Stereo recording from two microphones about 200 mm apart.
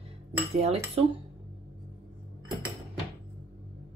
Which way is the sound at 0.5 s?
30° right (ahead or behind).